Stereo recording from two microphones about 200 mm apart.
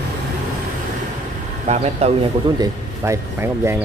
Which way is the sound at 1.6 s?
35° right (ahead or behind).